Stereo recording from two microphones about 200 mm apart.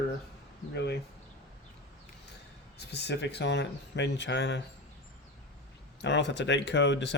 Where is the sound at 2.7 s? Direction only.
55° left (ahead or behind).